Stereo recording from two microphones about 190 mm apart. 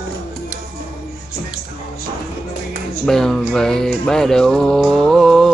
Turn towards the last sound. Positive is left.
turn(degrees=0)  # may be behind; listen again after turning